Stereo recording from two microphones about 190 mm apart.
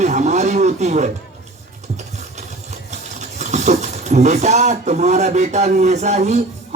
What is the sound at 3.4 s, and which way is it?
Speech, 35° right (ahead or behind).